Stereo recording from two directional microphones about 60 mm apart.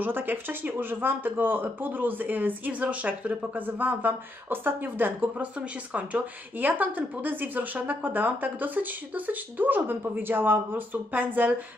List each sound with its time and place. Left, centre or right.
0.0 s speech: right